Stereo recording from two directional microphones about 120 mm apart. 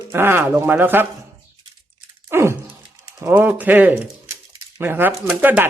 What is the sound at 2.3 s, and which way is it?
Dog, 20° right (ahead or behind).